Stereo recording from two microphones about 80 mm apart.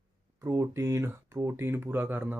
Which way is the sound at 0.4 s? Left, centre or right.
Right.